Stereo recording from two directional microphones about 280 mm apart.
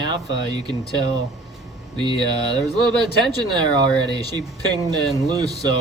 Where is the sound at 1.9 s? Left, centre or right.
Centre.